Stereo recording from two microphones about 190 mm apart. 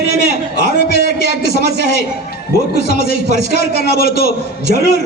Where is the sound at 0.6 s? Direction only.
60° left (ahead or behind).